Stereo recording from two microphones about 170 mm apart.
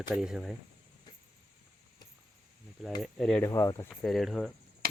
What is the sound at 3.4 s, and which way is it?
Speech, 20° left (ahead or behind).